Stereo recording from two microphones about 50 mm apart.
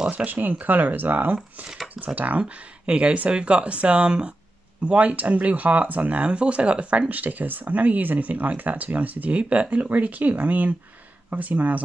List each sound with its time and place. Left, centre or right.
0.1 s speech: right
2.4 s speech: right
4.8 s speech: right